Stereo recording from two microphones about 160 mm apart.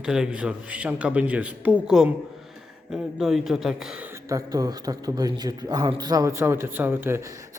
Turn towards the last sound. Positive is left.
turn(degrees=-15)  # may be behind; listen again after turning